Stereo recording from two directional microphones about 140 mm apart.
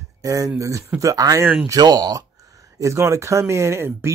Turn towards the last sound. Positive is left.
turn(degrees=-20)  # may be behind; listen again after turning